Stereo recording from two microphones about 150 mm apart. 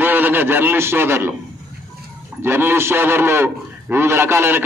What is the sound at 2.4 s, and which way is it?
A man's voice, 15° right (ahead or behind).